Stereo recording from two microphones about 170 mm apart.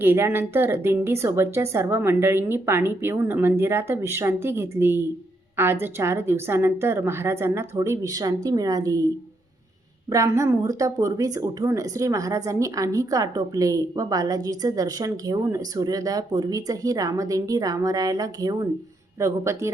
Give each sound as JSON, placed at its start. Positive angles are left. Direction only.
{"t": 0.0, "sound": "a woman's voice", "side_deg": -10}
{"t": 10.1, "sound": "a woman's voice", "side_deg": -20}